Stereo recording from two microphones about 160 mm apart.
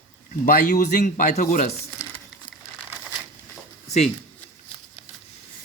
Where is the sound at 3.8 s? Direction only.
45° left (ahead or behind).